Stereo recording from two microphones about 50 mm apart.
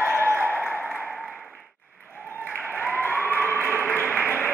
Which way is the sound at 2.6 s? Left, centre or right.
Left.